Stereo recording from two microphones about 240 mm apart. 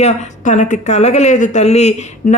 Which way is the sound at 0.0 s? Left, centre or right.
Left.